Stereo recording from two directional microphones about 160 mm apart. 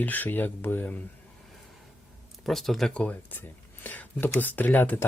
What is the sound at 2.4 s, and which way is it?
Speech, centre (ahead or behind).